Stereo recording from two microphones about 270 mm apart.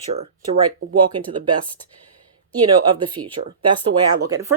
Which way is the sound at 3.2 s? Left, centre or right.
Right.